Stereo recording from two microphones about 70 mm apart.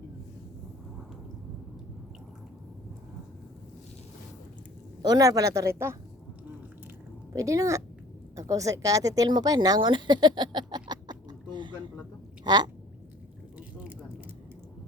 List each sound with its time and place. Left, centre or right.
5.0 s speech: right
7.3 s speech: right
13.6 s a sound: centre